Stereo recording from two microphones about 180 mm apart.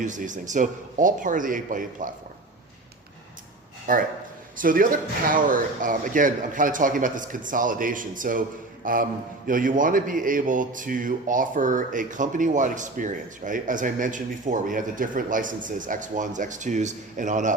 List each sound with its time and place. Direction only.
0.0 s a man's voice: 45° right (ahead or behind)
3.9 s a man's voice: 50° right (ahead or behind)